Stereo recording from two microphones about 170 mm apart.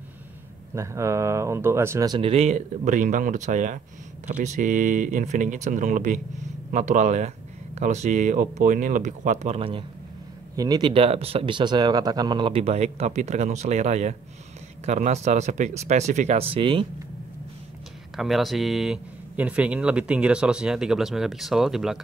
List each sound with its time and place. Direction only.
0.7 s speech: 15° right (ahead or behind); by 9.8 s 35° right (ahead or behind)
10.5 s speech: 20° right (ahead or behind)
18.1 s speech: centre (ahead or behind)